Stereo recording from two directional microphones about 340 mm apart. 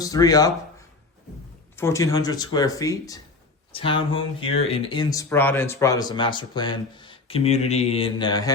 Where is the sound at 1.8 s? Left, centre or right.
Centre.